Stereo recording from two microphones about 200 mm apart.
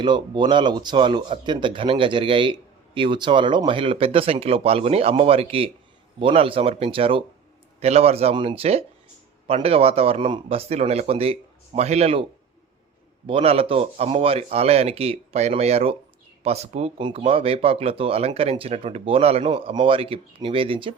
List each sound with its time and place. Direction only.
0.0 s speech: 20° right (ahead or behind)
13.2 s speech: 30° right (ahead or behind)